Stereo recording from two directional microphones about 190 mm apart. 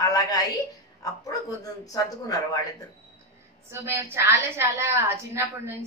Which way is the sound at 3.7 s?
15° right (ahead or behind).